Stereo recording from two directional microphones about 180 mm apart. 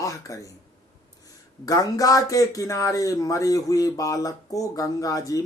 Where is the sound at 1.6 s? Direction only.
20° left (ahead or behind).